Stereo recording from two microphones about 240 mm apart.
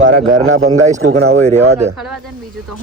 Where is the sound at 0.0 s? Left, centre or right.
Right.